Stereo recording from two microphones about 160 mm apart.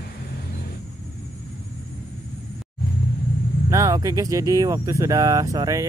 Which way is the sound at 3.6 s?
20° right (ahead or behind).